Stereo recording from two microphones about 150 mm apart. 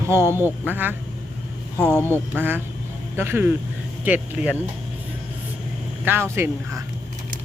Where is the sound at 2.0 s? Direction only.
15° left (ahead or behind).